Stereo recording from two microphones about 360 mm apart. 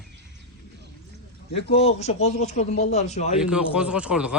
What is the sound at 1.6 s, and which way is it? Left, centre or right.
A man's voice, left.